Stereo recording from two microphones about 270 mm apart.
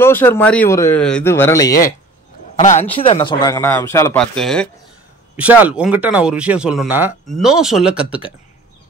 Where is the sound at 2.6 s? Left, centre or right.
Left; by 8.2 s centre.